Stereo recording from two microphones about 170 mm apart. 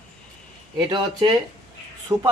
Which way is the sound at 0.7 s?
30° right (ahead or behind).